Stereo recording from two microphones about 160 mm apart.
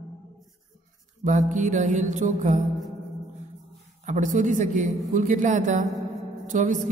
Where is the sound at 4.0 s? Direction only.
50° right (ahead or behind).